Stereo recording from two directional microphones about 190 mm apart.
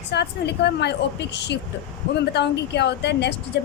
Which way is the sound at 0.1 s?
60° left (ahead or behind).